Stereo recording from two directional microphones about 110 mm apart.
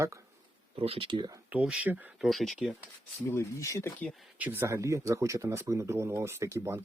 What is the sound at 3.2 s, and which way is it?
Speech, 25° left (ahead or behind).